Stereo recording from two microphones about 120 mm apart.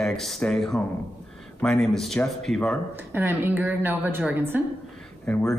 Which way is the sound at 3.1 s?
15° right (ahead or behind).